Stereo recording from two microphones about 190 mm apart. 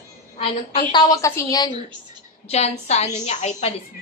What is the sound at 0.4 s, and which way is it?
A woman's voice, 25° left (ahead or behind).